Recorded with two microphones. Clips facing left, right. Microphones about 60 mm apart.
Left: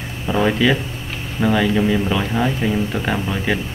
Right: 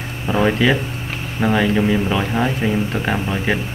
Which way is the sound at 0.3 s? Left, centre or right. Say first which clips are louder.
Even; centre.